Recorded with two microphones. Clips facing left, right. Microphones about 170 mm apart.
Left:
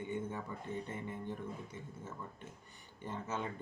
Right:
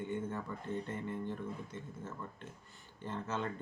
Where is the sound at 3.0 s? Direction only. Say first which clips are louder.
Right 2 dB; 10° left (ahead or behind).